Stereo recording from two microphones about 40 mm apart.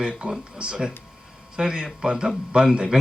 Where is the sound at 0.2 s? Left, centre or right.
Right.